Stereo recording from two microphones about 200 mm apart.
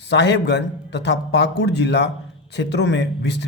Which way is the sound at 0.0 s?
60° left (ahead or behind).